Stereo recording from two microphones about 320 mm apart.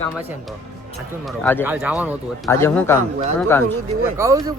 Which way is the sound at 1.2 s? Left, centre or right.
Centre.